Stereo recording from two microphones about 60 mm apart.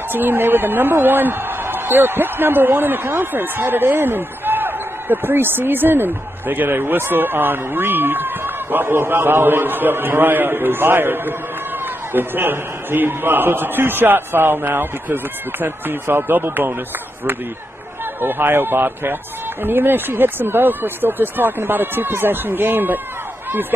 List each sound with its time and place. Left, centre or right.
0.1 s a woman's voice: right
18.2 s a woman's voice: right